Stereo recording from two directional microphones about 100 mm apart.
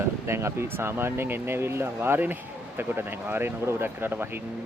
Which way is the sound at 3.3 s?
25° right (ahead or behind).